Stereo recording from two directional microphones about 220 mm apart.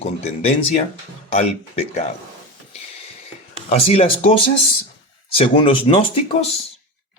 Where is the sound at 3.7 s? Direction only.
30° left (ahead or behind).